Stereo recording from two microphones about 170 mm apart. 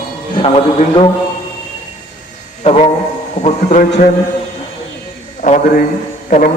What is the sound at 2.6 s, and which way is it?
A man's voice, 40° left (ahead or behind).